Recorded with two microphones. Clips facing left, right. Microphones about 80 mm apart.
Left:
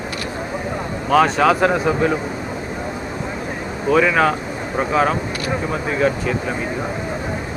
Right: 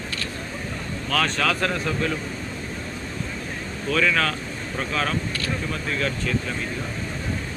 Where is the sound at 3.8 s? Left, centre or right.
Centre.